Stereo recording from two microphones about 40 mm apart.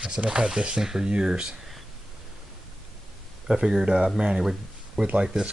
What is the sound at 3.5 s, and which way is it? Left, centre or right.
Speech, centre.